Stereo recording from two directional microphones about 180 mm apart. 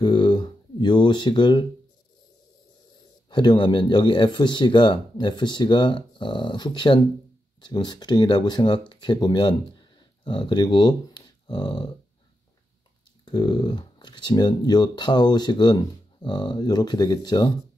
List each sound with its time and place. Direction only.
0.0 s speech: 25° left (ahead or behind)
3.3 s speech: 25° left (ahead or behind)
13.2 s speech: 25° left (ahead or behind)